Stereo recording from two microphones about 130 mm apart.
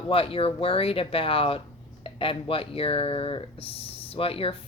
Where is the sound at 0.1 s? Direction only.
45° left (ahead or behind).